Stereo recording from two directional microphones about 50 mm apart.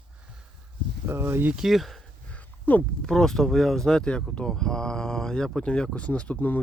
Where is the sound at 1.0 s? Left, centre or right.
Right.